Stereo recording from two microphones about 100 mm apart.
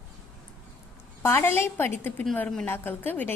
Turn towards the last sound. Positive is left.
turn(degrees=20)  # may be behind; listen again after turning